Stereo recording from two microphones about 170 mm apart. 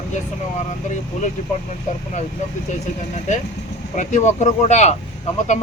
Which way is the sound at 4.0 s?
45° left (ahead or behind).